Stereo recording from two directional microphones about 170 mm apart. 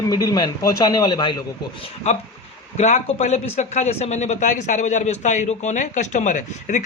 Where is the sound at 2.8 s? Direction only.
45° left (ahead or behind).